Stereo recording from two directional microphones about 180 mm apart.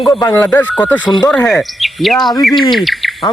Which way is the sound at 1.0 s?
25° left (ahead or behind).